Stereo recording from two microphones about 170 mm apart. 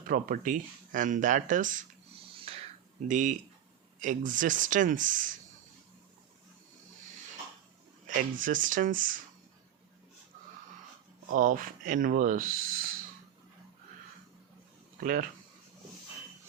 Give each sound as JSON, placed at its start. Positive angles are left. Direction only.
{"t": 0.1, "sound": "speech", "side_deg": -50}
{"t": 2.3, "sound": "a sound", "side_deg": -35}
{"t": 3.1, "sound": "speech", "side_deg": -45}
{"t": 8.0, "sound": "speech", "side_deg": -50}
{"t": 11.3, "sound": "speech", "side_deg": -55}
{"t": 15.0, "sound": "speech", "side_deg": -55}